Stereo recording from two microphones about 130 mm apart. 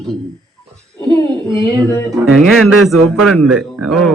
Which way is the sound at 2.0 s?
Centre (ahead or behind).